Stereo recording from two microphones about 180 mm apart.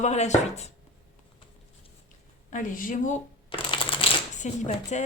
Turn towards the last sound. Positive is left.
turn(degrees=40)  # may be behind; listen again after turning